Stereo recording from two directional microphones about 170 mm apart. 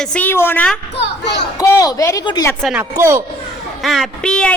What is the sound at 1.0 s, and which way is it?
Speech, 90° left.